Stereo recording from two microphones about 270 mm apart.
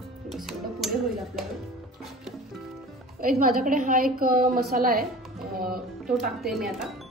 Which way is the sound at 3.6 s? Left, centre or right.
Right.